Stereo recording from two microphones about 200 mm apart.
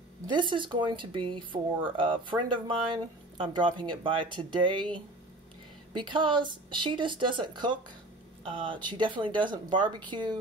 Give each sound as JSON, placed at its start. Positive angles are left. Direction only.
{"t": 0.3, "sound": "speech", "side_deg": -25}
{"t": 5.9, "sound": "speech", "side_deg": -25}